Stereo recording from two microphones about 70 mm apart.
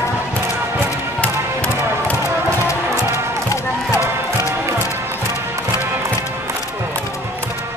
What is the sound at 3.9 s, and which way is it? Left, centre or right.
Music, right.